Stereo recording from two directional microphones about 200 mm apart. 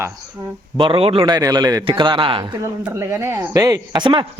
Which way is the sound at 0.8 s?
25° right (ahead or behind).